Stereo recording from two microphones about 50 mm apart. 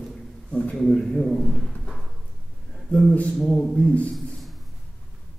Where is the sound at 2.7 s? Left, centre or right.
Centre.